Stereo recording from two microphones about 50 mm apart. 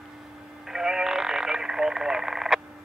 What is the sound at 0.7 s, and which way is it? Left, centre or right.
Radio, centre.